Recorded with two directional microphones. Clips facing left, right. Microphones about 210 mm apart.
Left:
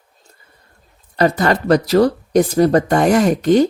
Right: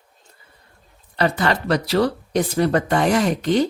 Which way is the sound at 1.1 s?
40° left (ahead or behind).